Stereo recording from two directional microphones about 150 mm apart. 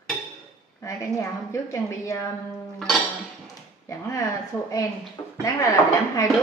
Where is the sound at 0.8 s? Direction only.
20° left (ahead or behind).